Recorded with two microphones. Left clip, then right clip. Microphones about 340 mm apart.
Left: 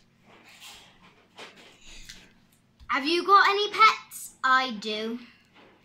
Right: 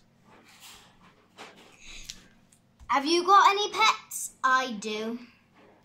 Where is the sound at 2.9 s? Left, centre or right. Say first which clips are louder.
Even; centre.